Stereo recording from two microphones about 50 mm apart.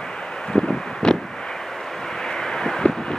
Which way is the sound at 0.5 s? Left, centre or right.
Centre.